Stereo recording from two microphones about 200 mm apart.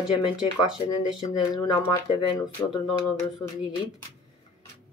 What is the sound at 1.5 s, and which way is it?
Speech, 20° left (ahead or behind).